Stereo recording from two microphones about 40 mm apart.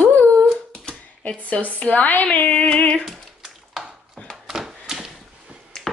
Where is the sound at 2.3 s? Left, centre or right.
Left.